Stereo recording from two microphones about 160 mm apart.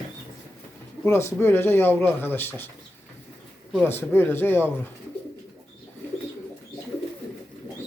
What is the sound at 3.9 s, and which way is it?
Speech, 15° left (ahead or behind).